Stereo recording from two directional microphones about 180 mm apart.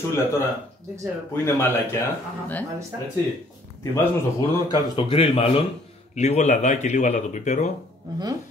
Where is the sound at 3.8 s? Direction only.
15° left (ahead or behind).